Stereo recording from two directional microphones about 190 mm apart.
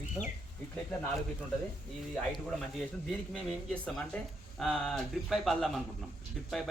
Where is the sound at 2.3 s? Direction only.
Centre (ahead or behind).